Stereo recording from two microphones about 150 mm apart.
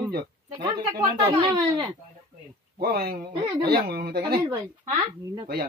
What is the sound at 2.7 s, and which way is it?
Speech, 90° right.